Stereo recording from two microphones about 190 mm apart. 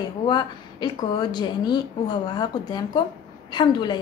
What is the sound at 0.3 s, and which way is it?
A woman's voice, 25° left (ahead or behind).